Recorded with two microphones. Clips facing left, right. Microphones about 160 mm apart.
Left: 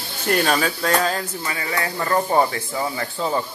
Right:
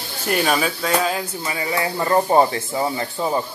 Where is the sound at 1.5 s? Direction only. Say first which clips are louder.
Right 4 dB; 20° right (ahead or behind).